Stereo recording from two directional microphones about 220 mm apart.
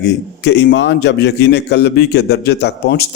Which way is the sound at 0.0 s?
50° left (ahead or behind).